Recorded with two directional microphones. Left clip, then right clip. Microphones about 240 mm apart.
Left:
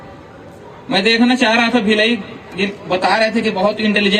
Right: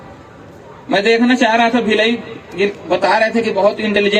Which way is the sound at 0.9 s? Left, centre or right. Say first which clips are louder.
Right 1 dB; left.